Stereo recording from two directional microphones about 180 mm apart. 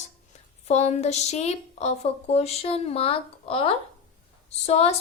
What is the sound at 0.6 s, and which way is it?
A woman's voice, 40° left (ahead or behind).